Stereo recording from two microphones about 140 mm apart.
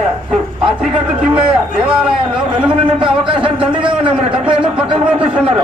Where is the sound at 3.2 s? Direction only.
35° right (ahead or behind).